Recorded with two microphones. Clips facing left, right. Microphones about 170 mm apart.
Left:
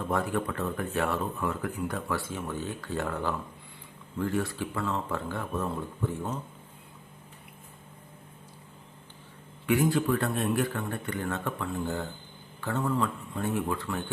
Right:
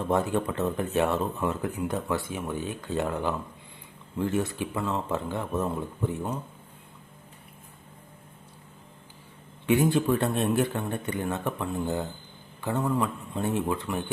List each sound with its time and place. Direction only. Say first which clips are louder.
0.1 s speech: right 4 dB; 25° right (ahead or behind)
9.6 s speech: right 2 dB; 25° right (ahead or behind)